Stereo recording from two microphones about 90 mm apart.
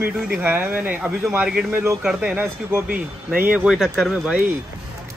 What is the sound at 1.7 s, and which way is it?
Speech, 25° right (ahead or behind).